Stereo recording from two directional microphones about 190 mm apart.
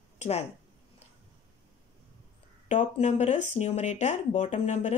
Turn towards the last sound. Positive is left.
turn(degrees=35)  # may be behind; listen again after turning